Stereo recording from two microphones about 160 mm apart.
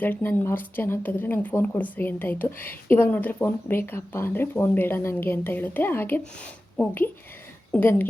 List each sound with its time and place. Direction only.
0.0 s speech: 15° left (ahead or behind)